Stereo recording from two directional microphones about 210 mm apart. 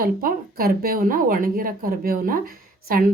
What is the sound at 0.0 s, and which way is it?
A woman's voice, 45° right (ahead or behind).